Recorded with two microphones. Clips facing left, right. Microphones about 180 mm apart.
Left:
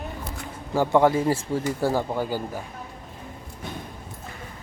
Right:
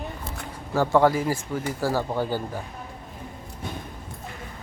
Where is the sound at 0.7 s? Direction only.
15° left (ahead or behind).